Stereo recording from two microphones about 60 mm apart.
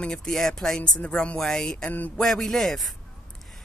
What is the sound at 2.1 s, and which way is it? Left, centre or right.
Speech, centre.